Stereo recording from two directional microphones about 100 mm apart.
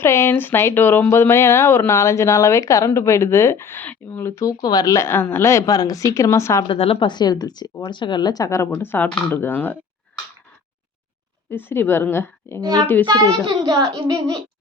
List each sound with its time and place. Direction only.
0.0 s speech: 25° left (ahead or behind)
6.7 s a woman's voice: 65° left (ahead or behind); by 8.7 s 30° left (ahead or behind)
8.7 s speech: 20° left (ahead or behind)
11.5 s speech: 20° left (ahead or behind)
12.5 s a child's voice: 35° right (ahead or behind)